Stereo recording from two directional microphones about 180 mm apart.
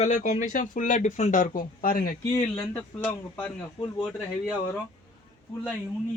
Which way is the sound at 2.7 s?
10° left (ahead or behind).